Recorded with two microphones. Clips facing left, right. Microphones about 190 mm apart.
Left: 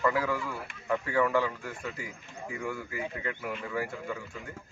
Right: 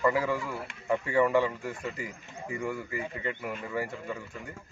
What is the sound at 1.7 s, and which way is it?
A man's voice, 5° right (ahead or behind).